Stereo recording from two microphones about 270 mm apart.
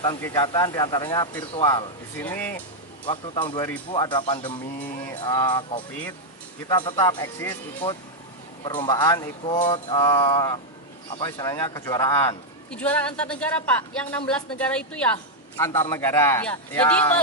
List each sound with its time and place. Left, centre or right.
0.0 s a man's voice: centre
3.1 s a man's voice: centre
5.9 s a man's voice: centre